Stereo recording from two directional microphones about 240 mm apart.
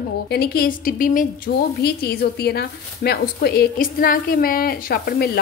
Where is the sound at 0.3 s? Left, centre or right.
Left.